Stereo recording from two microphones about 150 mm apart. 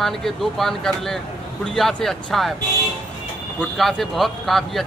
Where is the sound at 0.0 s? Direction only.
Centre (ahead or behind).